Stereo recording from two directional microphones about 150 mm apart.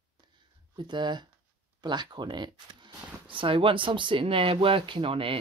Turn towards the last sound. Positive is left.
turn(degrees=-35)  # may be behind; listen again after turning